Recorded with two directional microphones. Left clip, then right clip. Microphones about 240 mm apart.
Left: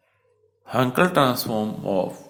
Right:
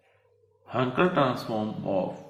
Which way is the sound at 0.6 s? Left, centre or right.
Left.